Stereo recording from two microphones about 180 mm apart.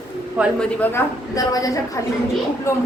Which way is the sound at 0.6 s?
10° left (ahead or behind).